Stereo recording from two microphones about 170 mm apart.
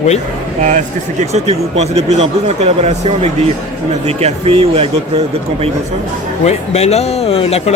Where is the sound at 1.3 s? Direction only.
40° right (ahead or behind).